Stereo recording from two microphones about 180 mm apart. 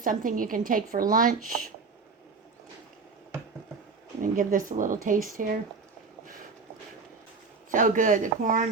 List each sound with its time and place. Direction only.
0.0 s a woman's voice: 50° right (ahead or behind)
4.2 s a woman's voice: 50° right (ahead or behind)
7.7 s a woman's voice: 45° right (ahead or behind)